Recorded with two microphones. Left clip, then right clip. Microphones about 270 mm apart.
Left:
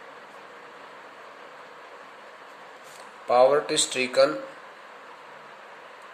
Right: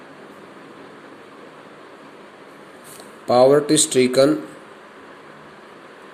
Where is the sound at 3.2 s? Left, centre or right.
Centre.